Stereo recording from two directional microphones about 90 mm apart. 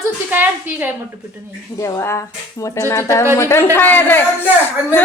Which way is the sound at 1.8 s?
30° left (ahead or behind).